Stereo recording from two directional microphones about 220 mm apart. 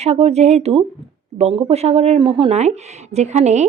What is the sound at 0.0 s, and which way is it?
A woman's voice, 30° right (ahead or behind).